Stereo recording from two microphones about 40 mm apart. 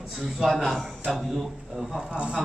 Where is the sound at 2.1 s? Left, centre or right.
Right.